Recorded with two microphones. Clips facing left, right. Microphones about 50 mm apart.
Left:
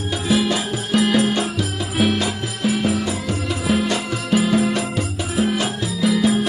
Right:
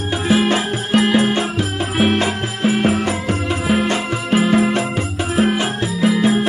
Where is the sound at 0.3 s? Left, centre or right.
Right.